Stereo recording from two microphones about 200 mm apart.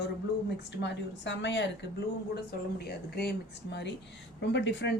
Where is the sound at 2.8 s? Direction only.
55° left (ahead or behind).